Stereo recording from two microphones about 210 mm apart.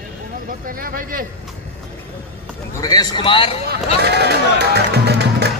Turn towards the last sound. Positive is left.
turn(degrees=-50)  # may be behind; listen again after turning